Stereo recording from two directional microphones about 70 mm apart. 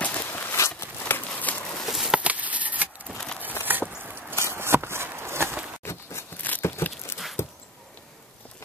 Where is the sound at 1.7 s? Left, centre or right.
Centre.